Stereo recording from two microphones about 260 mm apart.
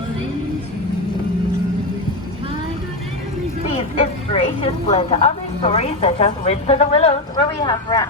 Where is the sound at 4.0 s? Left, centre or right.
Left.